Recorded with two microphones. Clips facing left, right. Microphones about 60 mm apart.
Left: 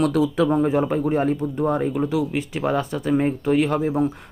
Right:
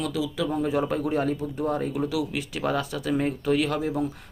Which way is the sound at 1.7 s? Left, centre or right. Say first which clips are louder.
Left 5 dB; left.